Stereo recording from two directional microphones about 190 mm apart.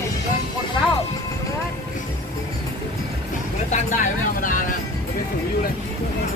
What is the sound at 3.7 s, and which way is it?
Vehicle, 40° left (ahead or behind).